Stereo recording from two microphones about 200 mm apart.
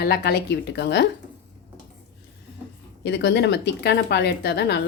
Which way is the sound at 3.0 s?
60° left (ahead or behind).